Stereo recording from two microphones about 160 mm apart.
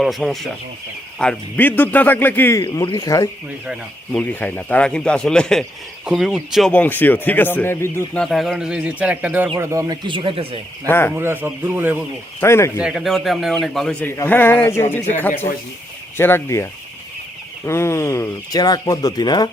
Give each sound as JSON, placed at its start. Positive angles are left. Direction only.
{"t": 0.0, "sound": "speech", "side_deg": 0}
{"t": 3.7, "sound": "speech", "side_deg": 5}
{"t": 8.2, "sound": "speech", "side_deg": 0}
{"t": 10.8, "sound": "speech", "side_deg": 15}
{"t": 11.1, "sound": "speech", "side_deg": -15}
{"t": 12.4, "sound": "speech", "side_deg": 15}
{"t": 12.8, "sound": "speech", "side_deg": 0}
{"t": 16.1, "sound": "speech", "side_deg": 15}
{"t": 17.7, "sound": "speech", "side_deg": 15}